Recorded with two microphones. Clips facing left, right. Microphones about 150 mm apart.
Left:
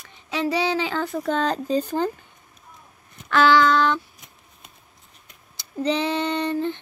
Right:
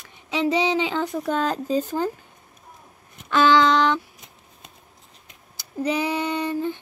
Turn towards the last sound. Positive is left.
turn(degrees=-5)  # may be behind; listen again after turning